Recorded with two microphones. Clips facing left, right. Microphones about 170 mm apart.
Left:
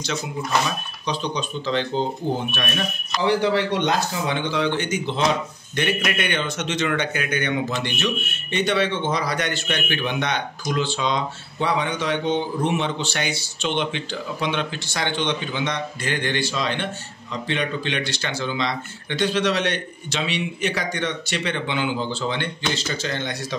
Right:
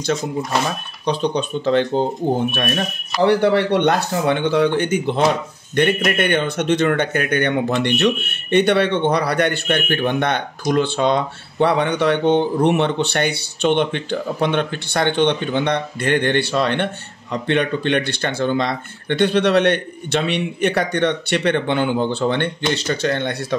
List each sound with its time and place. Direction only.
0.7 s speech: 55° right (ahead or behind)
3.2 s speech: 60° right (ahead or behind)